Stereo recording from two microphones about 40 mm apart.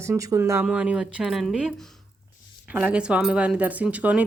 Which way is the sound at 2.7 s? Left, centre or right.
Right.